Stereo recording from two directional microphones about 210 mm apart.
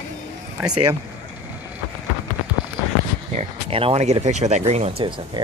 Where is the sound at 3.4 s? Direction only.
25° right (ahead or behind).